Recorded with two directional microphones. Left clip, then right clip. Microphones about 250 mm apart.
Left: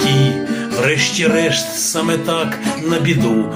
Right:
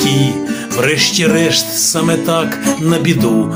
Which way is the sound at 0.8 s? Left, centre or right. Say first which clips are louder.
Right 3 dB; right.